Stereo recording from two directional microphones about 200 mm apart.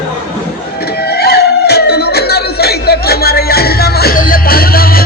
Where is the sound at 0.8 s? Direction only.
55° left (ahead or behind).